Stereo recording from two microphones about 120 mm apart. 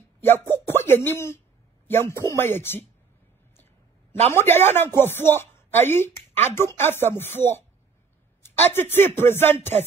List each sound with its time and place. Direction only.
0.2 s speech: 20° left (ahead or behind)
4.3 s speech: 20° left (ahead or behind)
8.7 s speech: 20° left (ahead or behind)